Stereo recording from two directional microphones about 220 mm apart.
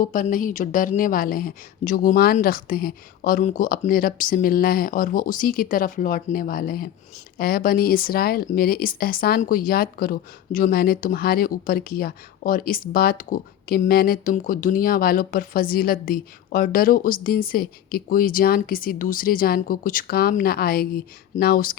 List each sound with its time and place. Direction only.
0.0 s speech: 40° left (ahead or behind)